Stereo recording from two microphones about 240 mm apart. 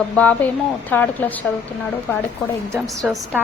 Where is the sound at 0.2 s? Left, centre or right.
Centre.